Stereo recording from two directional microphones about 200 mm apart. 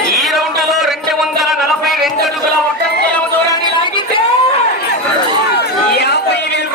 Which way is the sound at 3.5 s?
25° left (ahead or behind).